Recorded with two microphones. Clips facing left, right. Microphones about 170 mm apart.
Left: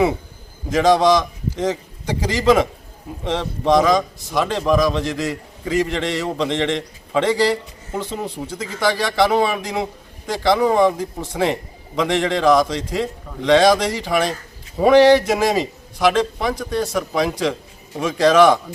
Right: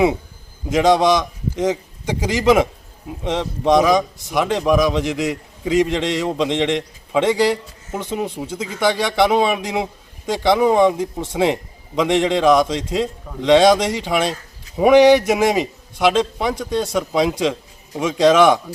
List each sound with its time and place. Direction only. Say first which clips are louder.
0.7 s a man's voice: even; 20° right (ahead or behind)